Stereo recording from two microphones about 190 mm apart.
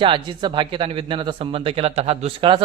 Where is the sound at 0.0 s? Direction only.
25° right (ahead or behind).